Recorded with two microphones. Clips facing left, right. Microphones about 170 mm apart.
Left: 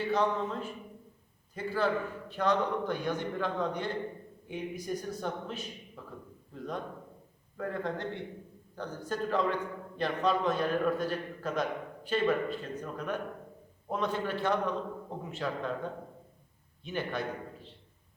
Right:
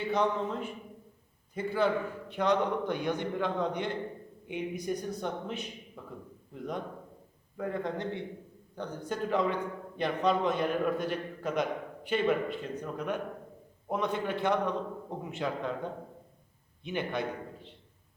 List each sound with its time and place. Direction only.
0.1 s a man's voice: 15° right (ahead or behind)